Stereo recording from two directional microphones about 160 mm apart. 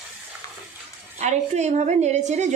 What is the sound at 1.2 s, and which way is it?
A woman's voice, 45° right (ahead or behind).